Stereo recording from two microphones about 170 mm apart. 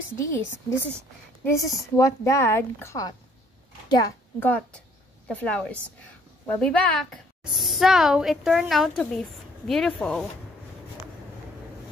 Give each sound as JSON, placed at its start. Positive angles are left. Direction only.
{"t": 0.1, "sound": "speech", "side_deg": 15}
{"t": 4.4, "sound": "speech", "side_deg": 10}